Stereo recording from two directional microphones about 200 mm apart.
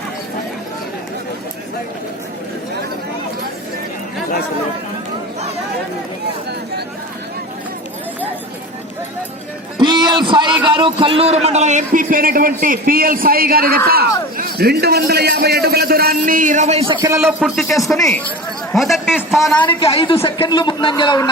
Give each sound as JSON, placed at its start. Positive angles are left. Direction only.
{"t": 9.7, "sound": "a sound", "side_deg": -20}
{"t": 10.6, "sound": "a man's voice", "side_deg": -25}
{"t": 17.2, "sound": "a man's voice", "side_deg": -5}
{"t": 19.6, "sound": "speech", "side_deg": 25}